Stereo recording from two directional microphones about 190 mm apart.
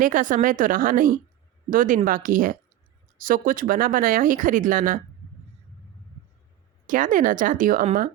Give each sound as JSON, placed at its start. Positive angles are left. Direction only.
{"t": 0.0, "sound": "speech", "side_deg": -45}
{"t": 6.8, "sound": "speech", "side_deg": -45}